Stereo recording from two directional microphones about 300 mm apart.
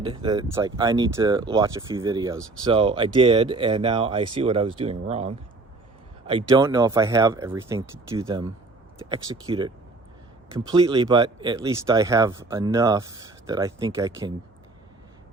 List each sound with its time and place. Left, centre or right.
0.0 s speech: centre